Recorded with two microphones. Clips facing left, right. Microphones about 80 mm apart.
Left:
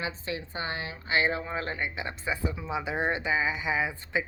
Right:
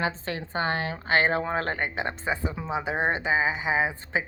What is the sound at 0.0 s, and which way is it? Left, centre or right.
A woman's voice, right.